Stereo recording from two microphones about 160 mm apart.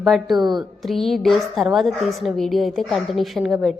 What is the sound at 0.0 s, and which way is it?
A woman's voice, centre (ahead or behind).